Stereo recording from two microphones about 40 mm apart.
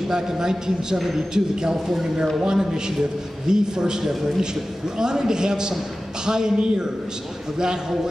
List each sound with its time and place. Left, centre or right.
0.1 s a man's voice: centre
4.0 s a man's voice: centre